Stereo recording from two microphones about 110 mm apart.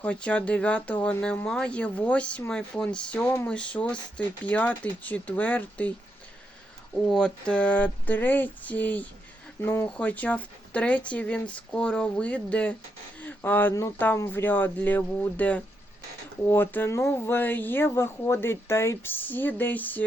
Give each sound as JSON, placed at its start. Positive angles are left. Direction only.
{"t": 0.0, "sound": "speech", "side_deg": 10}
{"t": 7.0, "sound": "speech", "side_deg": 5}